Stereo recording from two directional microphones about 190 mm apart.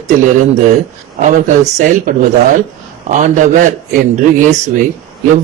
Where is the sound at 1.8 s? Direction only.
45° right (ahead or behind).